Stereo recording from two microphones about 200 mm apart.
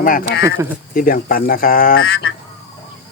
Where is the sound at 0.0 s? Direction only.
45° left (ahead or behind).